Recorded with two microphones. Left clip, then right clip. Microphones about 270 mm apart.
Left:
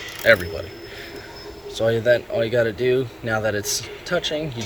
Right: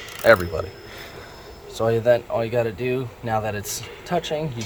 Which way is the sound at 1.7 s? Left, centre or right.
Centre.